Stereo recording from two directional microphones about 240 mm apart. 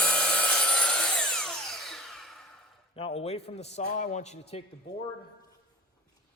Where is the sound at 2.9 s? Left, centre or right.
Left.